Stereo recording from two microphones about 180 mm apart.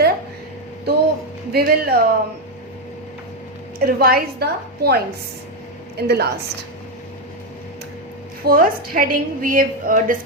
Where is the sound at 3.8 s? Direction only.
55° right (ahead or behind).